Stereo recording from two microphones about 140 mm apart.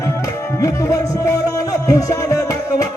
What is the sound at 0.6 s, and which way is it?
Music, 25° left (ahead or behind).